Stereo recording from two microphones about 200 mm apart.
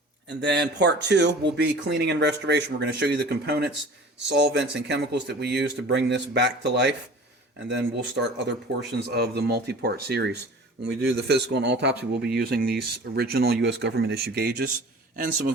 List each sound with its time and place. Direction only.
0.4 s speech: 60° right (ahead or behind)